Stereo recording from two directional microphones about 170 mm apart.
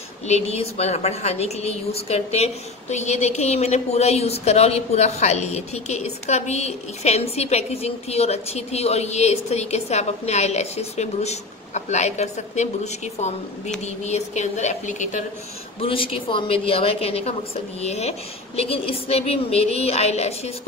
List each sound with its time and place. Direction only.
0.3 s a woman's voice: 40° left (ahead or behind)
15.8 s a woman's voice: 30° left (ahead or behind)